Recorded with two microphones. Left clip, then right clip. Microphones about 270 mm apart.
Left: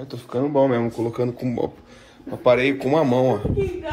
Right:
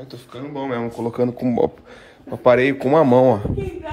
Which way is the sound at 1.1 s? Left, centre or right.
Right.